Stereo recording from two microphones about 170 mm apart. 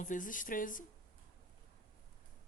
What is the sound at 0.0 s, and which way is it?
Speech, 50° left (ahead or behind).